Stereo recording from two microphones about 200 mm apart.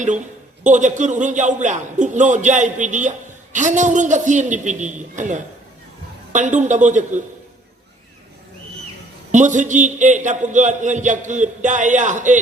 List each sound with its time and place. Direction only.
0.6 s a man's voice: 40° right (ahead or behind)
9.3 s a man's voice: 40° right (ahead or behind)